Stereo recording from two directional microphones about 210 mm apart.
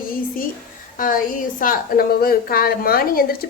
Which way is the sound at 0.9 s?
40° left (ahead or behind).